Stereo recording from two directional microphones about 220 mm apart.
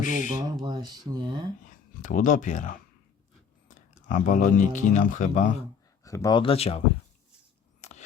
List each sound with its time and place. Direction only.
0.0 s speech: 35° left (ahead or behind)
0.6 s speech: 20° right (ahead or behind)
2.0 s speech: 35° left (ahead or behind)
4.1 s speech: 35° left (ahead or behind)
6.0 s speech: 15° left (ahead or behind)
7.8 s scissors: 30° left (ahead or behind)